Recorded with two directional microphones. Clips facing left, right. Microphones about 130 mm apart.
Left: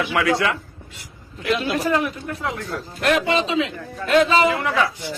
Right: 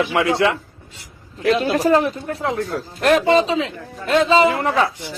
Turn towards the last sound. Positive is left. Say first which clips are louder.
# right 3 dB
turn(degrees=-35)  # may be behind; listen again after turning